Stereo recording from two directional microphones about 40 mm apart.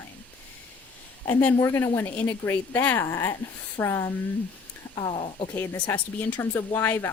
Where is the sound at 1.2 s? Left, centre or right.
Left.